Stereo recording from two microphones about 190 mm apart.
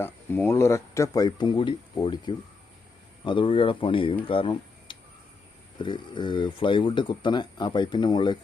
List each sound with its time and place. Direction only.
0.0 s speech: 15° left (ahead or behind)